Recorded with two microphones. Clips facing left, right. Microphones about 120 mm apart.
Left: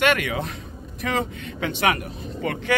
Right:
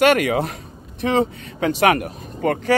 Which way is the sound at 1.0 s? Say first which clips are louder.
Right 7 dB; 30° right (ahead or behind).